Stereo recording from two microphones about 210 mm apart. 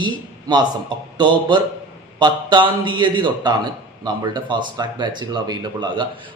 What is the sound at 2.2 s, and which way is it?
Speech, 20° right (ahead or behind).